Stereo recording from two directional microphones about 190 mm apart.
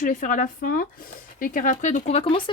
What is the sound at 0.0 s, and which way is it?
Speech, 45° left (ahead or behind).